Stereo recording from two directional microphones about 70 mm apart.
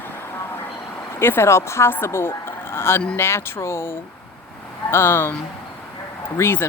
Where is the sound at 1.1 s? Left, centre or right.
Left.